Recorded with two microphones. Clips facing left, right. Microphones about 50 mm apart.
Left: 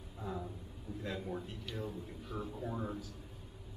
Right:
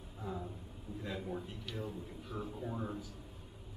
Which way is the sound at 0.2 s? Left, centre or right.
Centre.